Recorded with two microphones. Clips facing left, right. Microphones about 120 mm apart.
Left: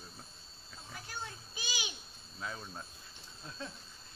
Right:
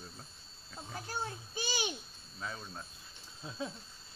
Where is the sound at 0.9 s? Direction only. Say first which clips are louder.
Right 5 dB; 35° right (ahead or behind).